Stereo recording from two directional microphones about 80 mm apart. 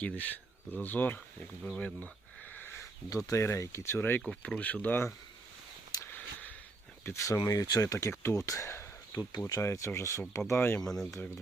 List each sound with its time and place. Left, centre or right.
0.0 s speech: left
2.6 s sniff: left
3.1 s speech: left
4.3 s speech: centre
6.1 s a sound: left
7.0 s speech: left
10.8 s speech: centre